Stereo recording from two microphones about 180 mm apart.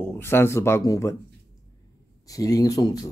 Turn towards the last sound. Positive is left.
turn(degrees=20)  # may be behind; listen again after turning